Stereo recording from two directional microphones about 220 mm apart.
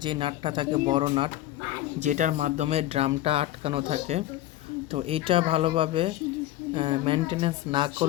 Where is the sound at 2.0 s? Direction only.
35° right (ahead or behind).